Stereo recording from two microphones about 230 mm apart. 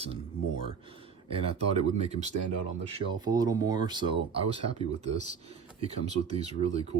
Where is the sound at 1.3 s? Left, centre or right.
Right.